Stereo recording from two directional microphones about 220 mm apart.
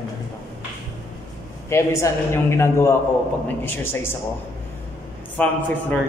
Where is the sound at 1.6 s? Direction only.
10° left (ahead or behind).